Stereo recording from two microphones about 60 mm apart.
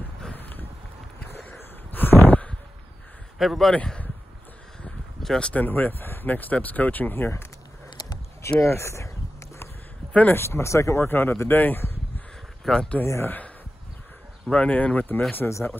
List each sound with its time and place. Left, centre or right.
0.3 s a sound: left
3.3 s speech: centre
3.7 s speech: centre
5.2 s speech: centre
5.5 s speech: left
8.4 s speech: left
10.3 s speech: left
11.1 s speech: left
12.7 s speech: centre
13.0 s speech: left
14.5 s speech: left